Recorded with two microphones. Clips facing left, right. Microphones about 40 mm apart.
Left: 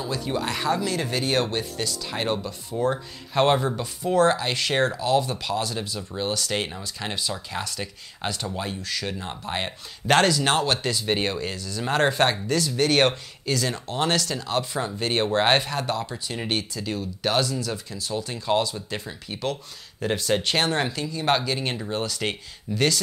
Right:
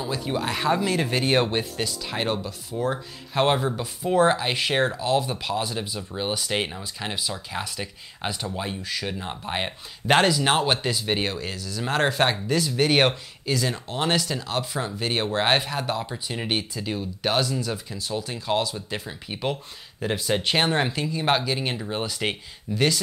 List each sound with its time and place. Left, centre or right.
0.0 s speech: centre
21.3 s speech: centre
21.9 s speech: centre